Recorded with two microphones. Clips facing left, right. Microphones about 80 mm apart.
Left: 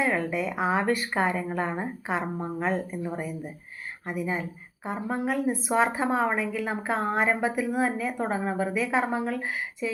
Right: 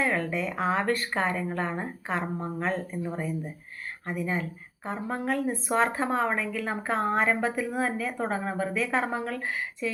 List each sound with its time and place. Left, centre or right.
0.0 s speech: centre